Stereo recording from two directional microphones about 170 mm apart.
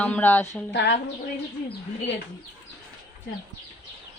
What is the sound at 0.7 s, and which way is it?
Speech, 85° left.